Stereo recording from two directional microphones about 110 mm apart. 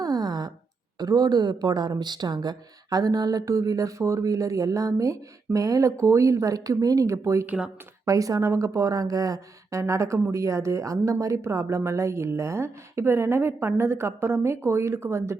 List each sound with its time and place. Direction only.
0.0 s a sound: 35° right (ahead or behind)
0.9 s a woman's voice: 35° right (ahead or behind)
7.4 s speech: 10° right (ahead or behind)
8.0 s speech: 30° right (ahead or behind)